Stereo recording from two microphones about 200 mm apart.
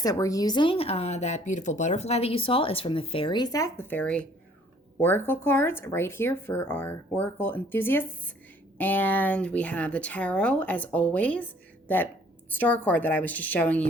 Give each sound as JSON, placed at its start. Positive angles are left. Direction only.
{"t": 0.0, "sound": "speech", "side_deg": 15}
{"t": 12.5, "sound": "speech", "side_deg": 10}